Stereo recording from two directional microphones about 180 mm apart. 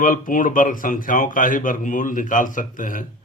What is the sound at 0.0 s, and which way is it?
A man's voice, 45° left (ahead or behind).